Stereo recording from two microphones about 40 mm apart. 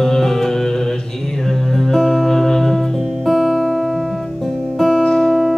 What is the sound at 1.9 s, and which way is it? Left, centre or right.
Music, centre.